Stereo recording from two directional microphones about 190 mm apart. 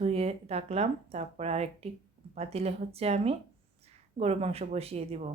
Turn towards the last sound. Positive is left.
turn(degrees=-35)  # may be behind; listen again after turning